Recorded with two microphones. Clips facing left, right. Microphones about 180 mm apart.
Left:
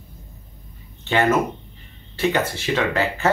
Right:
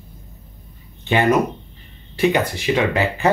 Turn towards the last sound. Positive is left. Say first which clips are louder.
# right 2 dB
turn(degrees=-15)  # may be behind; listen again after turning